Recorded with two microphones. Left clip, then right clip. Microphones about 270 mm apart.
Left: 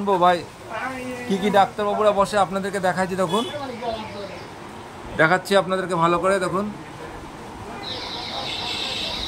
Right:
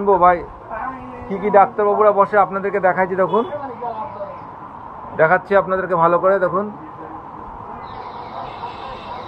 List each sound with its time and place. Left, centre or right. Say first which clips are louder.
0.0 s a man's voice: right 5 dB; centre
1.5 s speech: right 6 dB; left
2.0 s speech: right 3 dB; centre
2.5 s speech: right 6 dB; left
5.1 s a man's voice: right 4 dB; centre